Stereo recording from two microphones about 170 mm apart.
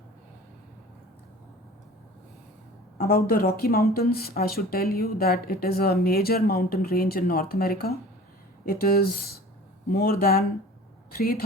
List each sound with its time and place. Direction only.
3.0 s speech: 60° left (ahead or behind)